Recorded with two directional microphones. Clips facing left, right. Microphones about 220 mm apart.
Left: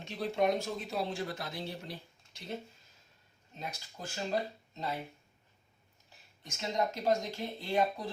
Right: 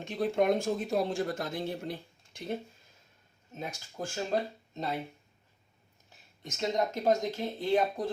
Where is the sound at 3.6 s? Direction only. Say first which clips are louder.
Right 5 dB; 50° right (ahead or behind).